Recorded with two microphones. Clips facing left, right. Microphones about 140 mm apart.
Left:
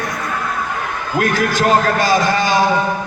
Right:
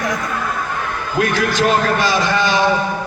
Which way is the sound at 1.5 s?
45° left (ahead or behind).